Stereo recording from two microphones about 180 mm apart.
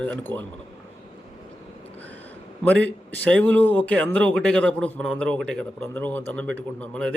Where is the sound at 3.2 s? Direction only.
5° left (ahead or behind).